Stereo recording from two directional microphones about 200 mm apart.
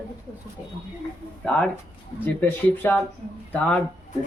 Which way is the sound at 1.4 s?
5° left (ahead or behind).